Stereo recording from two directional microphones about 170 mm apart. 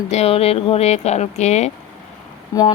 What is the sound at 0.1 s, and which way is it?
Speech, 40° left (ahead or behind).